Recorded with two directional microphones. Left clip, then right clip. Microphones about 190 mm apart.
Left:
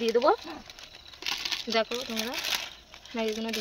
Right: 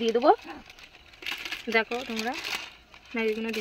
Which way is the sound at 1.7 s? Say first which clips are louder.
Right 4 dB; centre (ahead or behind).